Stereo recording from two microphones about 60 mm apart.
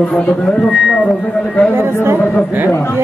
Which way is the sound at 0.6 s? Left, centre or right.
Centre.